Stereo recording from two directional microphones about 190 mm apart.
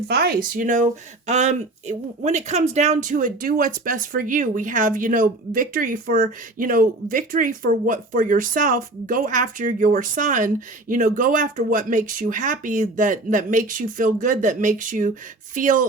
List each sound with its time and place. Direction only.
0.1 s speech: 55° right (ahead or behind)